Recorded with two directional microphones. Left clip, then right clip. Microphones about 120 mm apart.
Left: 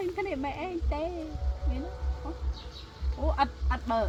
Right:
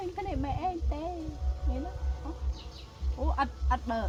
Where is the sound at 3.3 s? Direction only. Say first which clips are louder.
Left 1 dB; 35° right (ahead or behind).